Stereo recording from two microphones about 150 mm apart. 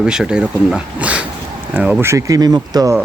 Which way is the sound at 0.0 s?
5° right (ahead or behind).